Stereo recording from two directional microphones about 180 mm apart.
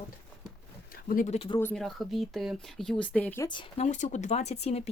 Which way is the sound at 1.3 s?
35° left (ahead or behind).